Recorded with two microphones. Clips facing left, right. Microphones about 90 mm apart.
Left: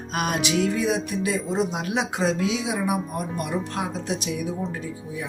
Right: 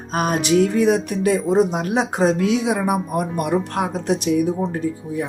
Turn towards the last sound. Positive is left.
turn(degrees=-50)  # may be behind; listen again after turning